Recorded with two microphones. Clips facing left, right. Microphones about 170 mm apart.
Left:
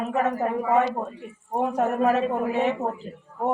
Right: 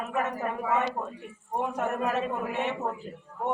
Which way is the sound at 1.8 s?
40° left (ahead or behind).